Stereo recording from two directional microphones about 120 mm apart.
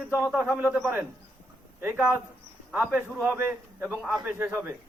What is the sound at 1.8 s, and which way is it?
Speech, 20° right (ahead or behind).